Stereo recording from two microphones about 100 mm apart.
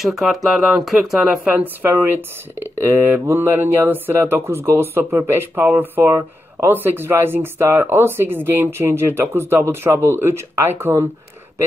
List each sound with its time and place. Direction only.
0.0 s speech: centre (ahead or behind); by 11.1 s 25° right (ahead or behind)